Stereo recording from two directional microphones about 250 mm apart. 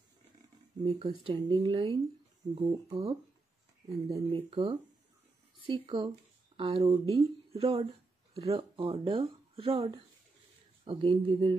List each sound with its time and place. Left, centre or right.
0.8 s speech: centre
4.1 s speech: right